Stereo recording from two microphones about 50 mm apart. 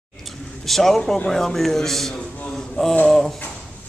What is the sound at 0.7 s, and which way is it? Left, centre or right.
A man's voice, centre.